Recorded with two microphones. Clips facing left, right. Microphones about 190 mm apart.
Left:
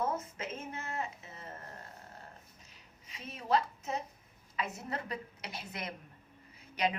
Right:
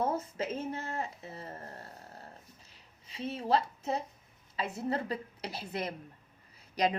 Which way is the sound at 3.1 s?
30° right (ahead or behind).